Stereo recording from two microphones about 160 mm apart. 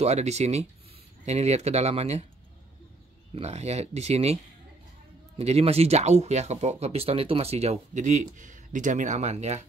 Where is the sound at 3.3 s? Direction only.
40° right (ahead or behind).